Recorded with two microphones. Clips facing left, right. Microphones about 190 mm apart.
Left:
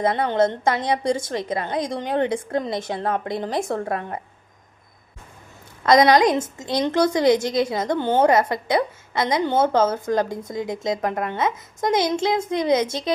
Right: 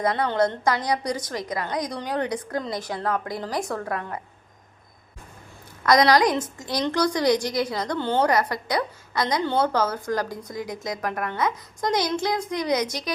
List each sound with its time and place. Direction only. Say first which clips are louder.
0.0 s a woman's voice: left 3 dB; 25° left (ahead or behind)
5.8 s a woman's voice: left 3 dB; 25° left (ahead or behind)